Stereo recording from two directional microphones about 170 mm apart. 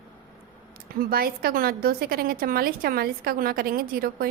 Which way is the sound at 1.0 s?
60° right (ahead or behind).